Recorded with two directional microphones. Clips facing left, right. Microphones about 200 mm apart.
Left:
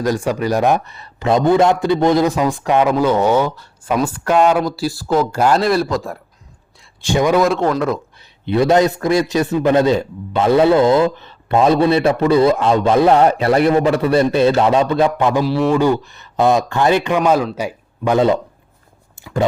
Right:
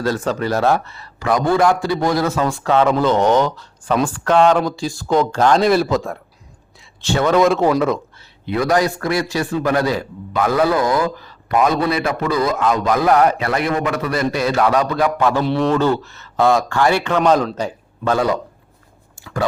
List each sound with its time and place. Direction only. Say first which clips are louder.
0.0 s speech: left 2 dB; 15° left (ahead or behind)
7.0 s speech: left 2 dB; 15° left (ahead or behind)
7.3 s a man's voice: right 1 dB; centre (ahead or behind)
8.4 s a man's voice: left 4 dB; 25° left (ahead or behind)
15.4 s speech: left 2 dB; 5° left (ahead or behind); by 19.5 s 20° left (ahead or behind)